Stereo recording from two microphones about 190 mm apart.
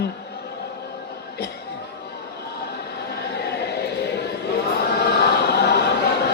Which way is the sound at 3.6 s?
60° left (ahead or behind).